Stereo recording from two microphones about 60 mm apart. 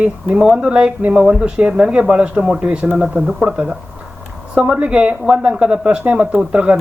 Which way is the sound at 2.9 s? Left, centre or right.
Centre.